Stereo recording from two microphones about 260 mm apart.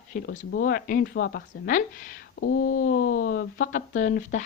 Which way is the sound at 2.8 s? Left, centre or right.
Left.